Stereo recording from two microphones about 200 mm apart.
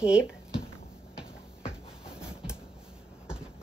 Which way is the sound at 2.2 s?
5° right (ahead or behind).